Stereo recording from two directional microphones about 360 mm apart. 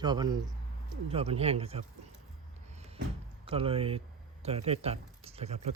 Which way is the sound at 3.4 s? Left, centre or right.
Centre.